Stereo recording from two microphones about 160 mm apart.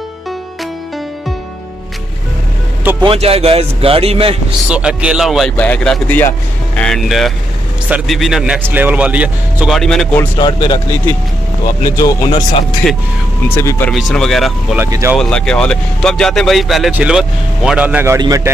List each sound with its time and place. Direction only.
3.0 s a man's voice: 35° right (ahead or behind)
4.6 s speech: 5° right (ahead or behind)
5.6 s speech: 10° left (ahead or behind); by 9.8 s 10° right (ahead or behind)
9.8 s speech: 5° left (ahead or behind)
10.4 s speech: 30° left (ahead or behind)
12.0 s speech: 25° left (ahead or behind)
13.6 s speech: 15° left (ahead or behind)
13.9 s speech: centre (ahead or behind)
14.8 s speech: 15° right (ahead or behind)
15.1 s a man's voice: 5° left (ahead or behind); by 18.5 s 20° right (ahead or behind)